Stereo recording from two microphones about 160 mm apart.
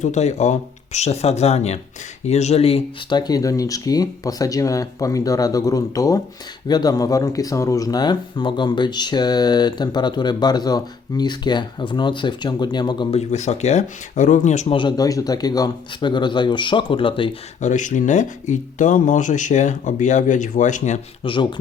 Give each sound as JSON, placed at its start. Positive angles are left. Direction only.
{"t": 0.0, "sound": "speech", "side_deg": 45}
{"t": 3.2, "sound": "speech", "side_deg": 25}
{"t": 13.1, "sound": "speech", "side_deg": 45}
{"t": 14.8, "sound": "speech", "side_deg": 25}
{"t": 17.6, "sound": "speech", "side_deg": 50}
{"t": 21.2, "sound": "speech", "side_deg": 35}